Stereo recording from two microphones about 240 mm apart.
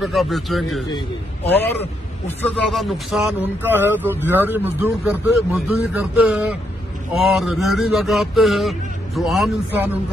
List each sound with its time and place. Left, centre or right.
0.0 s speech: centre
0.8 s a man's voice: left
2.2 s speech: centre